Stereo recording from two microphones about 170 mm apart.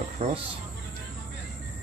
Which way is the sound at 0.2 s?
35° right (ahead or behind).